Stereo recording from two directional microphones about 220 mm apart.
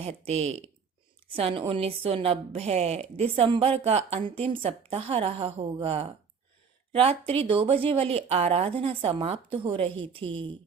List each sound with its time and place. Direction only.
0.3 s a woman's voice: 30° right (ahead or behind)